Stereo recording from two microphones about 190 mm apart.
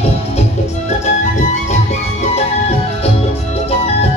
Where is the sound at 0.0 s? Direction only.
35° left (ahead or behind).